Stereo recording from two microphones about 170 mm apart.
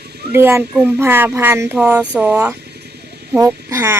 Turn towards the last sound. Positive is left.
turn(degrees=-15)  # may be behind; listen again after turning